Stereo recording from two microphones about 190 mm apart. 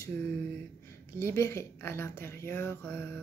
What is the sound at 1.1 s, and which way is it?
Speech, 15° left (ahead or behind).